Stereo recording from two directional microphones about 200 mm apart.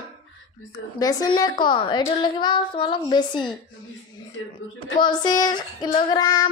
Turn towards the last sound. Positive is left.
turn(degrees=20)  # may be behind; listen again after turning